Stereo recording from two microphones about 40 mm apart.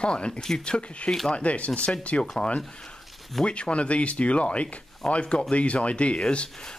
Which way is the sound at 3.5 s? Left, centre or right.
Left.